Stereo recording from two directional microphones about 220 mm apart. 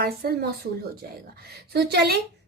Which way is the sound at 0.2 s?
45° right (ahead or behind).